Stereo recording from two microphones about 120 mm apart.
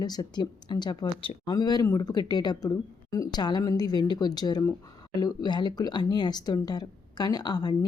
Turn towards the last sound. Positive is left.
turn(degrees=35)  # may be behind; listen again after turning